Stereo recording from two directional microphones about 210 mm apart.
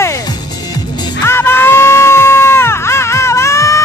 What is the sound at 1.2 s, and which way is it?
Music, 10° left (ahead or behind).